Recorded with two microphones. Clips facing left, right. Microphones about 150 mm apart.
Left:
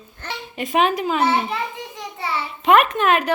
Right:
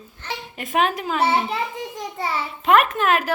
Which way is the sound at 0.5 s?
Centre (ahead or behind).